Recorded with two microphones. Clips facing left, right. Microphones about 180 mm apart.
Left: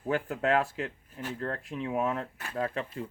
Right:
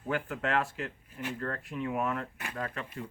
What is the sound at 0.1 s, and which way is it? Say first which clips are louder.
Speech: left 4 dB; 35° left (ahead or behind).